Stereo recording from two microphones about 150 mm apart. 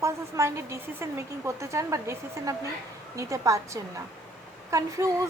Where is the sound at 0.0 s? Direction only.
20° right (ahead or behind).